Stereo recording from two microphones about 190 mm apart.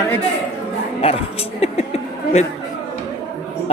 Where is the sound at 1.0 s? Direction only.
30° left (ahead or behind).